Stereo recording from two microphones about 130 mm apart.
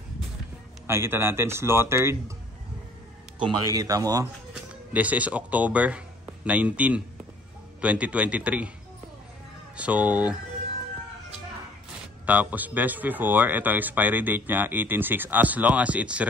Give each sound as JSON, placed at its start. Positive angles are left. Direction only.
{"t": 0.8, "sound": "speech", "side_deg": -20}
{"t": 3.7, "sound": "speech", "side_deg": -30}
{"t": 4.9, "sound": "a man's voice", "side_deg": -10}
{"t": 9.8, "sound": "speech", "side_deg": -10}
{"t": 12.3, "sound": "speech", "side_deg": -10}